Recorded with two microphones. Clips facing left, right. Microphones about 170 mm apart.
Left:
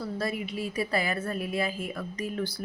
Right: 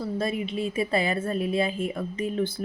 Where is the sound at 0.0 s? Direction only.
20° right (ahead or behind).